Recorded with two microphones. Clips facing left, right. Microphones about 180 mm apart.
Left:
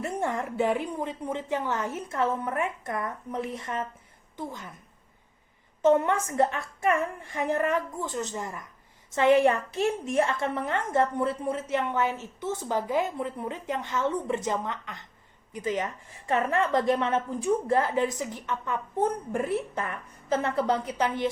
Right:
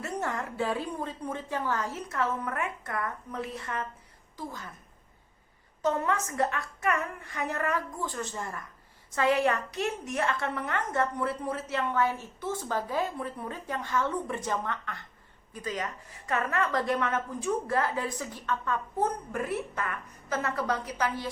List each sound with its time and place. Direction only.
0.0 s a woman's voice: 25° left (ahead or behind)
5.8 s a woman's voice: 25° left (ahead or behind)